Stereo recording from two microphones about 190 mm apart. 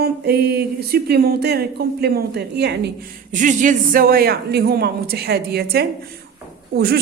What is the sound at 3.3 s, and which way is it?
A woman's voice, 40° right (ahead or behind).